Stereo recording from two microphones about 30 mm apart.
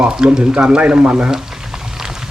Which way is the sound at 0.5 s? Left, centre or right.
Right.